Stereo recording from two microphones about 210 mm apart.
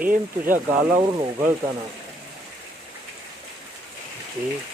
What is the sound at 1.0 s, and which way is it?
Speech, 20° right (ahead or behind).